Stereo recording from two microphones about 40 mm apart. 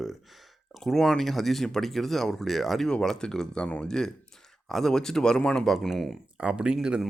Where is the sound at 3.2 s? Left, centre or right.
Centre.